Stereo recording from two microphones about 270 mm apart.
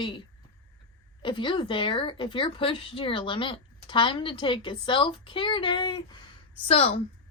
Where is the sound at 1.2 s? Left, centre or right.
Centre.